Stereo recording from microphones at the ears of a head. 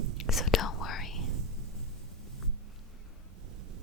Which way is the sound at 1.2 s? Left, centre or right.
Right.